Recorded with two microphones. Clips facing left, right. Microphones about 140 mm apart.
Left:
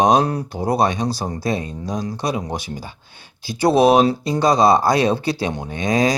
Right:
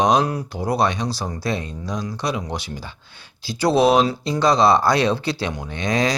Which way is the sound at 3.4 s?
20° left (ahead or behind).